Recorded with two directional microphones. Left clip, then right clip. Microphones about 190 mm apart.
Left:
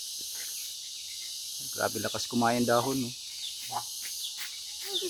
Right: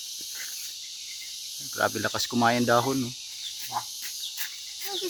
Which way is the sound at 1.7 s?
20° right (ahead or behind).